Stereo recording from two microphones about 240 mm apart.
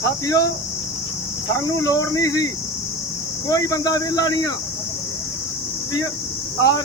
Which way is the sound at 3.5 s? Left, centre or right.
Centre.